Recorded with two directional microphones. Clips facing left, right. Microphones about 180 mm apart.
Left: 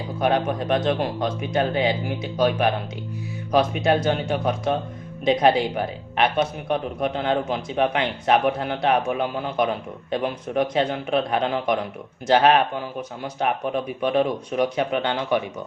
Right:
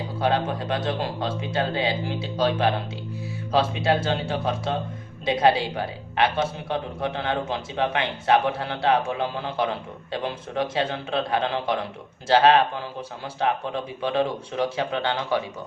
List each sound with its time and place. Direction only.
0.2 s speech: 15° left (ahead or behind)
13.4 s speech: 15° left (ahead or behind)